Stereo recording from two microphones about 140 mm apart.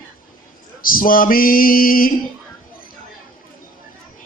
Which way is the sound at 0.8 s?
90° left.